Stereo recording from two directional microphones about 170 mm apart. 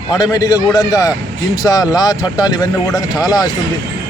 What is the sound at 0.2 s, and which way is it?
Speech, 20° left (ahead or behind).